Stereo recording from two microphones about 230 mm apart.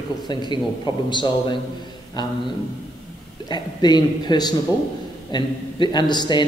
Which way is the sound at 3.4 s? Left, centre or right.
Centre.